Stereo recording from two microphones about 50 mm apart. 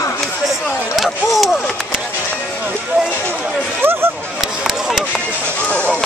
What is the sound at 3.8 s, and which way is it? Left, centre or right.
Speech, right.